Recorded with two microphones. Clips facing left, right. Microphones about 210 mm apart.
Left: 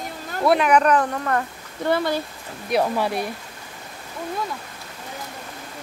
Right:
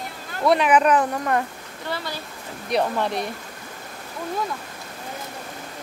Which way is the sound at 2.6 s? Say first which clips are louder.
Left 1 dB; 5° left (ahead or behind).